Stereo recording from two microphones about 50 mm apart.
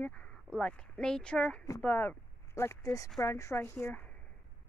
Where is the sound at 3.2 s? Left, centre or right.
Left.